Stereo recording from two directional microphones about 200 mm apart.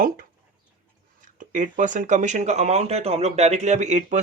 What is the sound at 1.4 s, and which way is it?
Speech, 40° right (ahead or behind).